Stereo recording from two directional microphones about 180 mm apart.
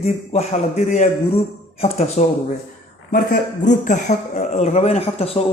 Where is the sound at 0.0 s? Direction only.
40° left (ahead or behind).